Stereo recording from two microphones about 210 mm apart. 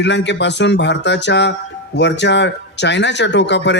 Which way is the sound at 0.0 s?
55° left (ahead or behind).